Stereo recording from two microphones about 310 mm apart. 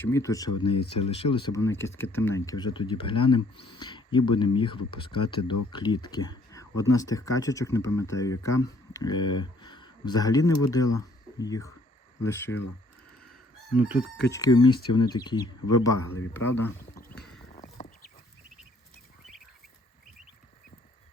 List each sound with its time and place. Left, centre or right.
0.0 s speech: centre
13.7 s chicken: centre
14.3 s speech: centre
17.2 s clip-clop: centre
17.5 s a sound: left